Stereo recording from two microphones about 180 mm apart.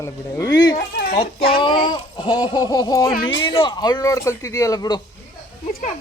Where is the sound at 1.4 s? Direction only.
60° left (ahead or behind).